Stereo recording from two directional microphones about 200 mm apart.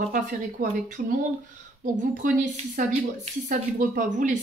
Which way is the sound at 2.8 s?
40° right (ahead or behind).